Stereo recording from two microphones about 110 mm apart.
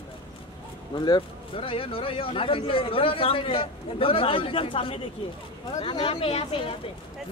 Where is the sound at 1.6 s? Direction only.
55° left (ahead or behind).